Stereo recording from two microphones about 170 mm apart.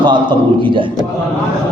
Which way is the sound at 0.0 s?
30° right (ahead or behind).